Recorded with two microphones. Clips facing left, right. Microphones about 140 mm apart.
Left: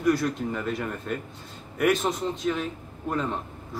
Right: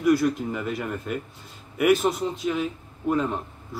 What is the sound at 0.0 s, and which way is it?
A man's voice, 5° right (ahead or behind).